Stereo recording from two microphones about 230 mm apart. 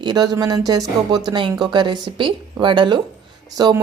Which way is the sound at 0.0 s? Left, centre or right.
Centre.